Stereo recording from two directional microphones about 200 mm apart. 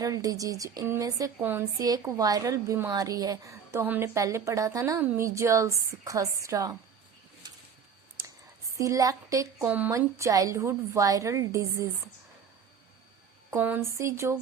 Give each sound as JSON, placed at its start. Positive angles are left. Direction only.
{"t": 0.0, "sound": "speech", "side_deg": -15}
{"t": 8.8, "sound": "speech", "side_deg": -15}
{"t": 13.5, "sound": "speech", "side_deg": -10}